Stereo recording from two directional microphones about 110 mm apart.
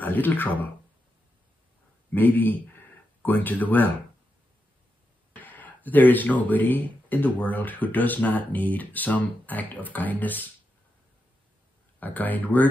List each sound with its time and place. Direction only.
0.0 s speech: 15° left (ahead or behind)
2.1 s speech: 15° left (ahead or behind)
5.3 s speech: 15° left (ahead or behind)
12.0 s speech: 15° left (ahead or behind)